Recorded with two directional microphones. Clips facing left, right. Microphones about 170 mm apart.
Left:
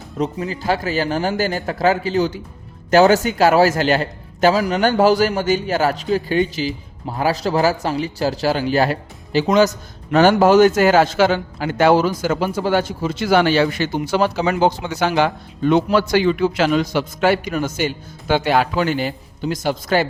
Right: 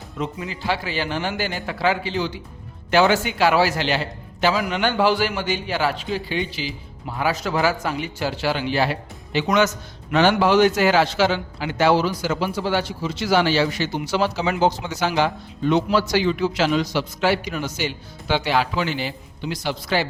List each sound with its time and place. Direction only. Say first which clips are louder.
0.2 s a man's voice: left 6 dB; 40° left (ahead or behind)